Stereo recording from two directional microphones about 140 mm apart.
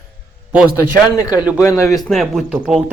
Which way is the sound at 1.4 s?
10° right (ahead or behind).